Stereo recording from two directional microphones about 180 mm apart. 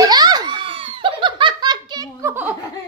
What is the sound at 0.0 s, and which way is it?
Belly laugh, 20° right (ahead or behind).